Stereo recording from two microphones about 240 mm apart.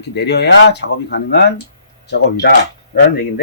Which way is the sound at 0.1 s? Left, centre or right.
Left.